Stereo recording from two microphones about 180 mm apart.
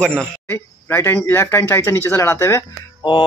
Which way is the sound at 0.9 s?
15° left (ahead or behind).